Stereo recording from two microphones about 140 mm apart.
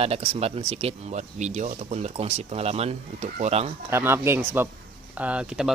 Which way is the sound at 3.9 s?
15° right (ahead or behind).